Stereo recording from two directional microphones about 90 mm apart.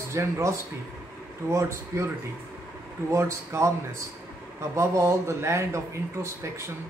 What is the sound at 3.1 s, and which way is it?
Speech, 30° right (ahead or behind).